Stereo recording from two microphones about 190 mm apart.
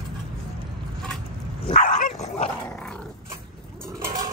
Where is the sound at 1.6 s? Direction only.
40° left (ahead or behind).